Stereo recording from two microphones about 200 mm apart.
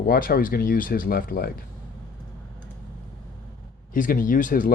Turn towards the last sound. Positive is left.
turn(degrees=40)  # may be behind; listen again after turning